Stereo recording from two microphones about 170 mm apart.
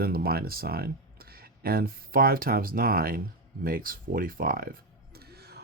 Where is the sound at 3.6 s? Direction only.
55° right (ahead or behind).